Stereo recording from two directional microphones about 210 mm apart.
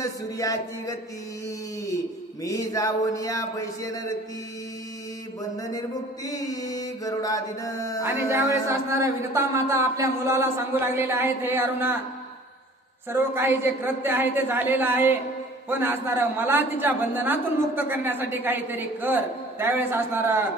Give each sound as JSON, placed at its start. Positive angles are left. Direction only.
{"t": 0.0, "sound": "mantra", "side_deg": 15}
{"t": 2.4, "sound": "mantra", "side_deg": 15}
{"t": 5.6, "sound": "mantra", "side_deg": 15}
{"t": 8.0, "sound": "speech", "side_deg": -10}
{"t": 13.1, "sound": "speech", "side_deg": -10}